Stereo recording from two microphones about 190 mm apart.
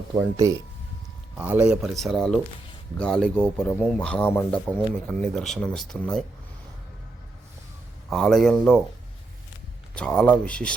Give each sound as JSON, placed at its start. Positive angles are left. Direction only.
{"t": 0.2, "sound": "a man's voice", "side_deg": -15}
{"t": 8.1, "sound": "speech", "side_deg": 0}
{"t": 9.9, "sound": "speech", "side_deg": 5}